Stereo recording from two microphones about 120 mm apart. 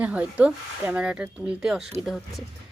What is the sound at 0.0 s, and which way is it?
Speech, 10° right (ahead or behind).